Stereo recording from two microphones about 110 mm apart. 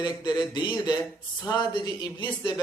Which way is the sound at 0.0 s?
40° left (ahead or behind).